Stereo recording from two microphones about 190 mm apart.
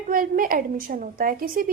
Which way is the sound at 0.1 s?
45° right (ahead or behind).